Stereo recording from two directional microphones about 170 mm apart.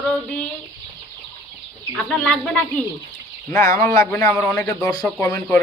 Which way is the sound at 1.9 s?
5° left (ahead or behind).